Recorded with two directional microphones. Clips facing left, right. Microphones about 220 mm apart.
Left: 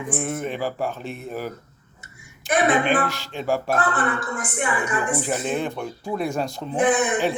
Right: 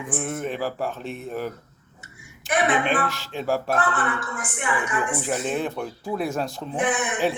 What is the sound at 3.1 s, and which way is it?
Speech, centre (ahead or behind).